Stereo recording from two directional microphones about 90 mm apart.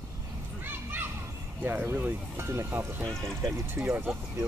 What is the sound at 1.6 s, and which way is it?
Speech, 20° right (ahead or behind).